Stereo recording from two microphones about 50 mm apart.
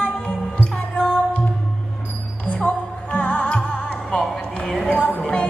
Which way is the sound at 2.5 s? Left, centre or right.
Left.